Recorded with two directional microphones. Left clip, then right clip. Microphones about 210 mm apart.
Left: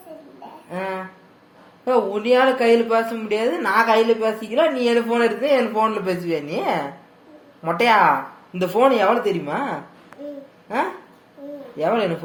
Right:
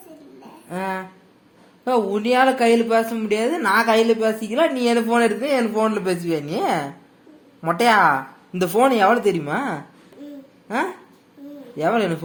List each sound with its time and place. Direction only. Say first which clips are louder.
0.7 s speech: right 1 dB; 60° right (ahead or behind)
11.8 s speech: even; 60° right (ahead or behind)